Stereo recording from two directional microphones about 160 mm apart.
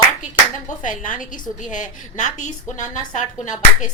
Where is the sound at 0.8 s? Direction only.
55° left (ahead or behind).